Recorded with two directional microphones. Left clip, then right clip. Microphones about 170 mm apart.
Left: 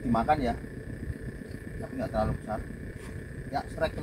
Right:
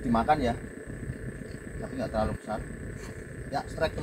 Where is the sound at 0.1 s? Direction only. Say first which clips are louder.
Right 1 dB; 5° right (ahead or behind).